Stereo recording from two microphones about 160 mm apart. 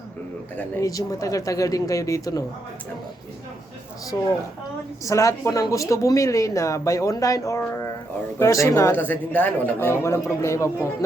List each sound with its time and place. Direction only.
0.5 s speech: 20° left (ahead or behind)
4.1 s speech: 20° left (ahead or behind)